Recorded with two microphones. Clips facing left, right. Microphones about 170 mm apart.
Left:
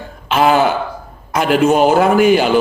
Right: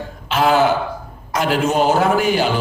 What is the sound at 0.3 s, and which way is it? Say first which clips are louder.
Cough: left 3 dB; 55° left (ahead or behind).